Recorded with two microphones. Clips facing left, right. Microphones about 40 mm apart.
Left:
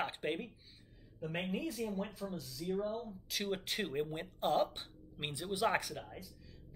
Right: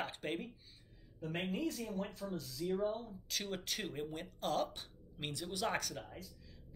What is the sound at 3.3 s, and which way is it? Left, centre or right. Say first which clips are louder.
Speech: left 3 dB; centre.